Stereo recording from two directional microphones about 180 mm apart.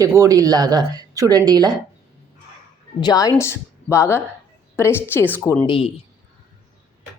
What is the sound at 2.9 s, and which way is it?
A woman's voice, 20° left (ahead or behind).